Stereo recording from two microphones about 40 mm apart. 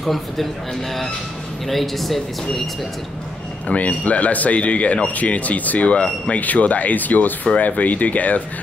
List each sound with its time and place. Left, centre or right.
0.0 s speech: centre
1.7 s speech: centre
3.7 s speech: left